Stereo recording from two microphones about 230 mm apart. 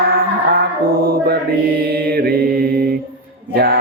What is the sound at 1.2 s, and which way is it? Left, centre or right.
Mantra, right.